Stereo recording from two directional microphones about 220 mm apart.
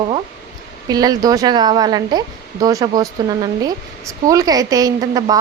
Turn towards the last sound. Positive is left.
turn(degrees=-15)  # may be behind; listen again after turning